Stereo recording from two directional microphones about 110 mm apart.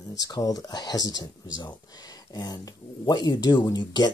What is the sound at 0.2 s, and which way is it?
Speech, 35° left (ahead or behind).